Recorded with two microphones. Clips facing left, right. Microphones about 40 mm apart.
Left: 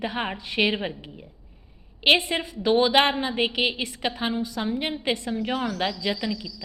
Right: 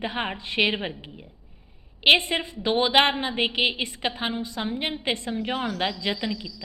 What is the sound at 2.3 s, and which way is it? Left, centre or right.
A woman's voice, right.